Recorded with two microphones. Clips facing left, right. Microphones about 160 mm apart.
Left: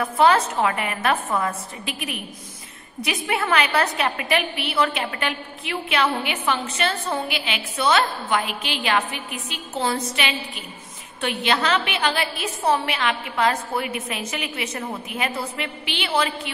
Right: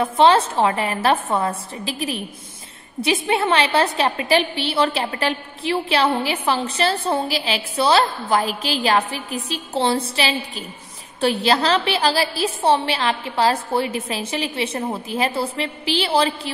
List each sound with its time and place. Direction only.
0.0 s a woman's voice: 30° right (ahead or behind)